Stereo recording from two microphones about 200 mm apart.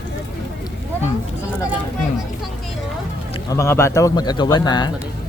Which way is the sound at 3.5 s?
15° left (ahead or behind).